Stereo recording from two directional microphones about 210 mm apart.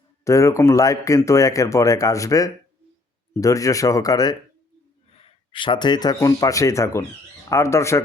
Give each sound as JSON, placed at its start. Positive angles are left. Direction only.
{"t": 0.3, "sound": "speech", "side_deg": 15}
{"t": 5.5, "sound": "speech", "side_deg": 25}